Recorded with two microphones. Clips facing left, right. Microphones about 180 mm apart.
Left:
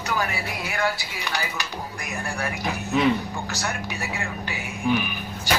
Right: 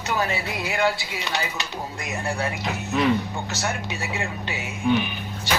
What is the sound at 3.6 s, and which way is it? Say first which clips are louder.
Speech: right 3 dB; 20° right (ahead or behind).